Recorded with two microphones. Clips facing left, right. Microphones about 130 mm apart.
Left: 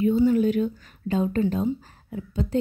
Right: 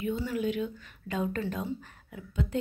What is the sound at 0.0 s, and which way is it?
Speech, 35° left (ahead or behind).